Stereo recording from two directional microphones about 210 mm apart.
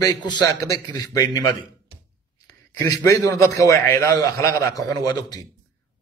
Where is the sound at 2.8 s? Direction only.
15° left (ahead or behind).